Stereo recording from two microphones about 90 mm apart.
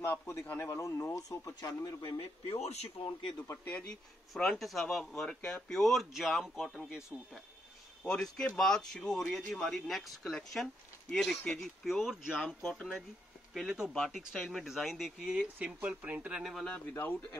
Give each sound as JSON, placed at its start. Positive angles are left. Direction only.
{"t": 0.0, "sound": "speech", "side_deg": 30}
{"t": 1.5, "sound": "speech", "side_deg": 50}
{"t": 2.0, "sound": "speech", "side_deg": 70}
{"t": 3.6, "sound": "speech", "side_deg": 20}
{"t": 4.3, "sound": "speech", "side_deg": 0}
{"t": 8.0, "sound": "speech", "side_deg": 10}
{"t": 13.7, "sound": "speech", "side_deg": -10}
{"t": 13.9, "sound": "speech", "side_deg": 0}
{"t": 16.6, "sound": "speech", "side_deg": 15}
{"t": 16.9, "sound": "speech", "side_deg": 30}